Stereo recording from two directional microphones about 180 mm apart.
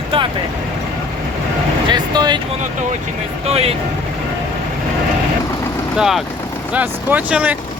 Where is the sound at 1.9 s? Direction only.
25° right (ahead or behind).